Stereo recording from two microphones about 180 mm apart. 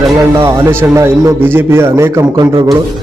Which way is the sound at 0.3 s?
15° right (ahead or behind).